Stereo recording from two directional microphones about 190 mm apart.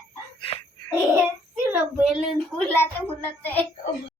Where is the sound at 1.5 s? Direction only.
5° right (ahead or behind).